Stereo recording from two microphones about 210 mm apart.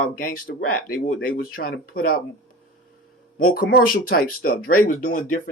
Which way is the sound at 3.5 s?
45° left (ahead or behind).